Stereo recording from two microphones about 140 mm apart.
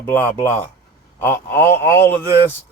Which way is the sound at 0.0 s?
10° left (ahead or behind).